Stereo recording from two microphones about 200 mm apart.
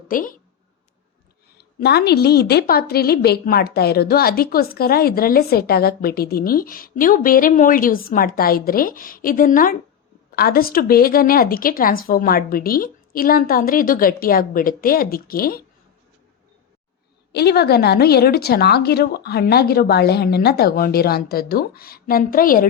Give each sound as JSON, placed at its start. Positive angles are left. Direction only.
{"t": 0.1, "sound": "a woman's voice", "side_deg": 45}
{"t": 1.5, "sound": "a woman's voice", "side_deg": 55}
{"t": 17.3, "sound": "a woman's voice", "side_deg": 55}